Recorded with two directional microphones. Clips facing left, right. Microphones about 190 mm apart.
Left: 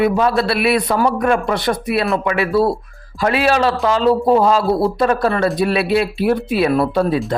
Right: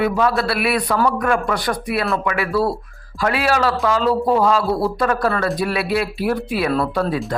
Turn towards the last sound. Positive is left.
turn(degrees=20)  # may be behind; listen again after turning